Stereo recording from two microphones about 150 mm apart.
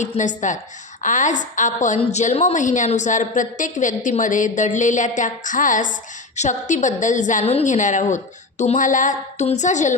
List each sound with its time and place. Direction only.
0.0 s a woman's voice: 55° left (ahead or behind)